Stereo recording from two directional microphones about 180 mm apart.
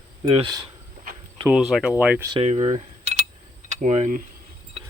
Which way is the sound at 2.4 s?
40° right (ahead or behind).